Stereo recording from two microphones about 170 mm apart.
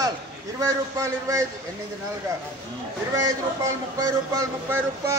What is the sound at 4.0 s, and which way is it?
A man's voice, 20° right (ahead or behind).